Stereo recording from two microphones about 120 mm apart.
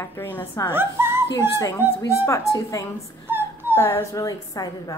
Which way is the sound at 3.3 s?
20° right (ahead or behind).